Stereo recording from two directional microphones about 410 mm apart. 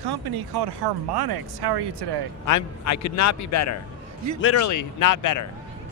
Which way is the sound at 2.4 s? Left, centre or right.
Left.